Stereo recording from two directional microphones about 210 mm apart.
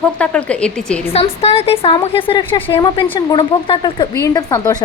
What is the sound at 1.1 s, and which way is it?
A woman's voice, 30° left (ahead or behind).